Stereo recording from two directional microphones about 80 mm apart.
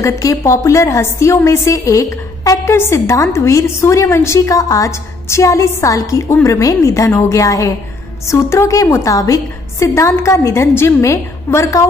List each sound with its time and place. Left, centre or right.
0.0 s a woman's voice: left